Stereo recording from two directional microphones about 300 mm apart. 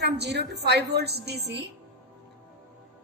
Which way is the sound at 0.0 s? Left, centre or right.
Right.